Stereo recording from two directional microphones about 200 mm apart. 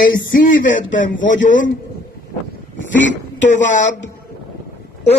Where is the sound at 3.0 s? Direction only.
65° left (ahead or behind).